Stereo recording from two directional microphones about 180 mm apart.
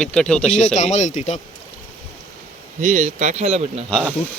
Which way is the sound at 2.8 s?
45° right (ahead or behind).